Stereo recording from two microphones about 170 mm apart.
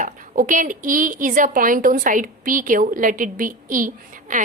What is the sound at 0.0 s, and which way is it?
A woman's voice, 50° right (ahead or behind).